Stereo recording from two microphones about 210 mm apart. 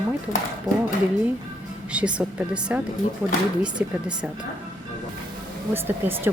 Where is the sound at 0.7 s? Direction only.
20° right (ahead or behind).